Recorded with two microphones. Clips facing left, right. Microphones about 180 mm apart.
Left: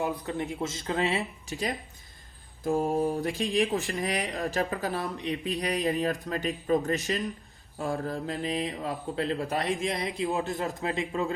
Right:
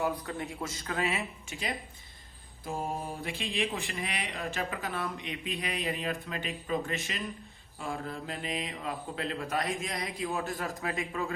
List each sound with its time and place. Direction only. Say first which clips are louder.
0.0 s speech: left 2 dB; 20° left (ahead or behind)